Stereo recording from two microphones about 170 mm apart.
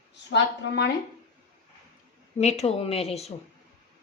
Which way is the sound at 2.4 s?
40° left (ahead or behind).